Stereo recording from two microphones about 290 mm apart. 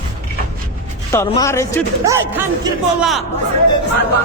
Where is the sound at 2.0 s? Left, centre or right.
Centre.